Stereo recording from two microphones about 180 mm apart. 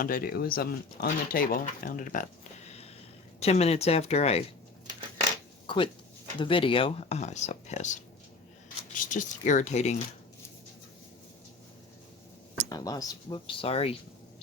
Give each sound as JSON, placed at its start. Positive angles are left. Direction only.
{"t": 0.0, "sound": "speech", "side_deg": 55}
{"t": 5.6, "sound": "speech", "side_deg": 25}
{"t": 9.0, "sound": "speech", "side_deg": 45}
{"t": 12.6, "sound": "speech", "side_deg": 20}